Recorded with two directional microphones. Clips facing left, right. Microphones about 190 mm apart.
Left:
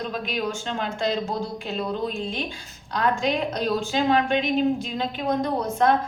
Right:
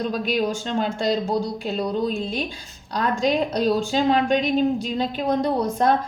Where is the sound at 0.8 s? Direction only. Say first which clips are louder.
Right 4 dB; 35° right (ahead or behind).